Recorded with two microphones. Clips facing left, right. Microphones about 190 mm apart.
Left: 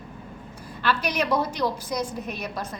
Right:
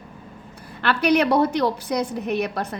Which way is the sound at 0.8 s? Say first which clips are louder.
Right 7 dB; 60° right (ahead or behind).